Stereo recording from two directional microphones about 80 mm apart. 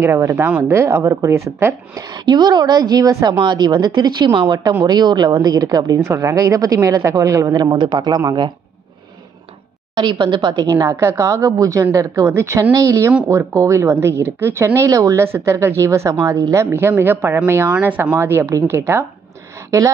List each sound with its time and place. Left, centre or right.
0.0 s a woman's voice: right
2.0 s a woman's voice: right
3.4 s a woman's voice: right
6.0 s a woman's voice: right
7.7 s speech: right
9.9 s a woman's voice: right
11.0 s a woman's voice: right
15.2 s a woman's voice: right
17.7 s a woman's voice: centre; by 19.9 s right